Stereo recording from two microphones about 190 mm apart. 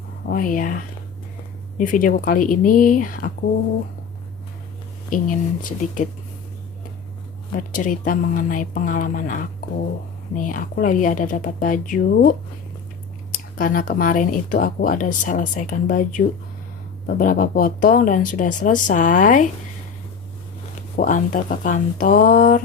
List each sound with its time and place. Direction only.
0.3 s speech: 45° left (ahead or behind)
5.1 s speech: 45° left (ahead or behind)
7.5 s speech: 45° left (ahead or behind)
13.3 s speech: 45° left (ahead or behind)
20.9 s speech: 45° left (ahead or behind)